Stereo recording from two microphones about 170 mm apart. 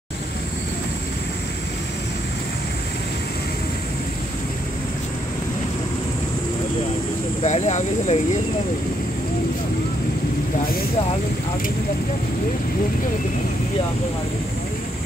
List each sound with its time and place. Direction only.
7.4 s cricket: 45° left (ahead or behind)